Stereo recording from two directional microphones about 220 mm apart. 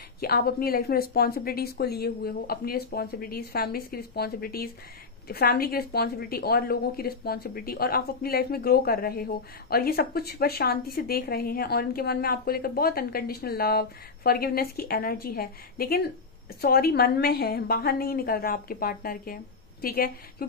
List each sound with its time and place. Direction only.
0.2 s a woman's voice: 45° left (ahead or behind)